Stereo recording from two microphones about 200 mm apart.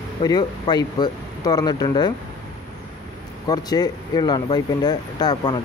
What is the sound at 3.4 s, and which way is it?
Speech, 20° left (ahead or behind).